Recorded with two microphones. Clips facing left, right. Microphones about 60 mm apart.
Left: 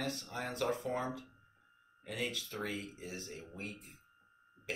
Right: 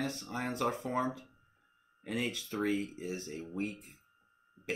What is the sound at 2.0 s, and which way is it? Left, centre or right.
Speech, right.